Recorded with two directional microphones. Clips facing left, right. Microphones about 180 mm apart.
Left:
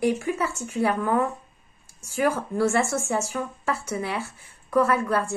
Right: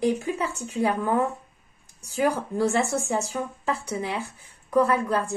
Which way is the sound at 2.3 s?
15° right (ahead or behind).